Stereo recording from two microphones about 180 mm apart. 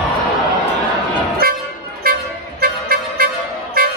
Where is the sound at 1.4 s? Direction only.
55° right (ahead or behind).